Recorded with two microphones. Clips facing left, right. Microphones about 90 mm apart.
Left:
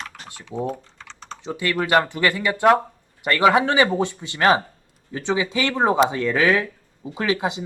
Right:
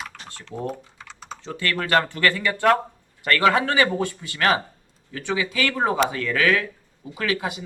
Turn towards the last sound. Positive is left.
turn(degrees=20)  # may be behind; listen again after turning